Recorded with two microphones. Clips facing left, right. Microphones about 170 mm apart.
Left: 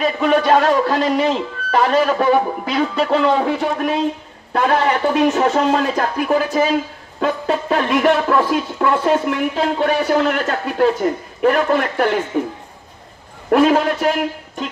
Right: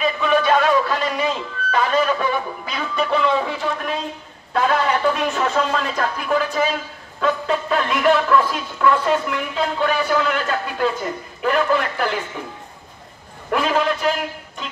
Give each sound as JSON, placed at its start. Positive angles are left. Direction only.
{"t": 0.0, "sound": "speech", "side_deg": 40}
{"t": 13.5, "sound": "speech", "side_deg": 45}